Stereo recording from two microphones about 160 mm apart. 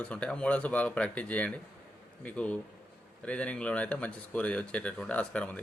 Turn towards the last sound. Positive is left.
turn(degrees=10)  # may be behind; listen again after turning